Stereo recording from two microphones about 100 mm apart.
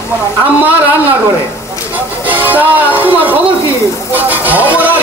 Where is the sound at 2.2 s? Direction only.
15° right (ahead or behind).